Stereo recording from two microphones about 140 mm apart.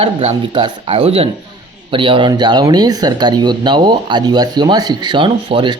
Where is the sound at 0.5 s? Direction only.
35° right (ahead or behind).